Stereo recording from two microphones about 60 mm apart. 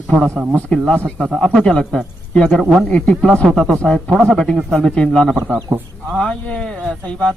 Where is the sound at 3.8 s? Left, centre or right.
Centre.